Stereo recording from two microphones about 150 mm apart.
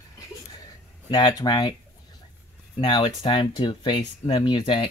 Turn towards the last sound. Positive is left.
turn(degrees=30)  # may be behind; listen again after turning